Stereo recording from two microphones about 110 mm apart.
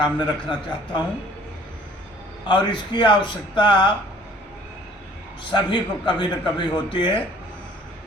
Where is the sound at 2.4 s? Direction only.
45° left (ahead or behind).